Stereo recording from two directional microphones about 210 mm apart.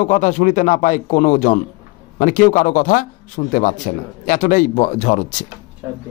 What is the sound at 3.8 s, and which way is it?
A man's voice, 40° left (ahead or behind).